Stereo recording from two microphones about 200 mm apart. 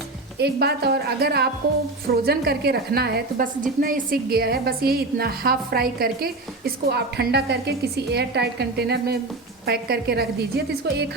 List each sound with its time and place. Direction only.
0.3 s a woman's voice: 55° right (ahead or behind)